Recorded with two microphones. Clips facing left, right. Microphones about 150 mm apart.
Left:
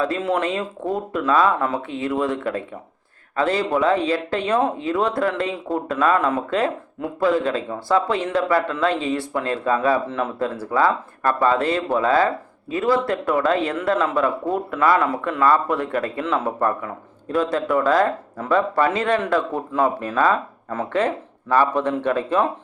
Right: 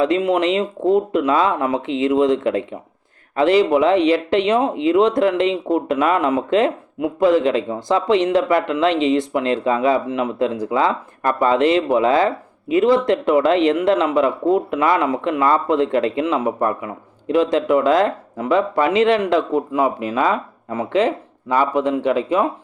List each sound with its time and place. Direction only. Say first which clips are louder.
0.0 s speech: right 5 dB; 20° right (ahead or behind)